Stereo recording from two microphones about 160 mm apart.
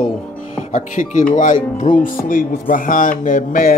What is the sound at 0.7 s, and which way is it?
Speech, 55° left (ahead or behind).